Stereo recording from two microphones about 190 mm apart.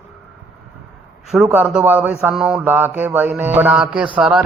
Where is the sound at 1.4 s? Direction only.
10° right (ahead or behind).